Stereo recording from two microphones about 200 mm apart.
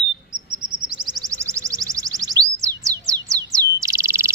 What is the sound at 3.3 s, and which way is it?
Bird, 15° right (ahead or behind).